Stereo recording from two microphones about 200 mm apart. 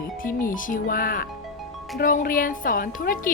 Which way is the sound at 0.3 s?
40° left (ahead or behind).